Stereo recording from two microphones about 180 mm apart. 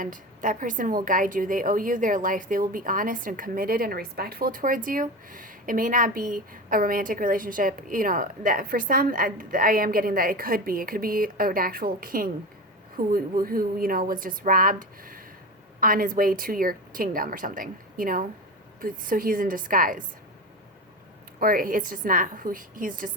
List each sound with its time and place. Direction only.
0.0 s a woman's voice: 45° right (ahead or behind)
21.3 s a woman's voice: 50° right (ahead or behind)